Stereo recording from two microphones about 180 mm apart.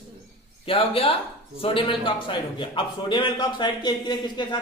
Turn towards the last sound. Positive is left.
turn(degrees=25)  # may be behind; listen again after turning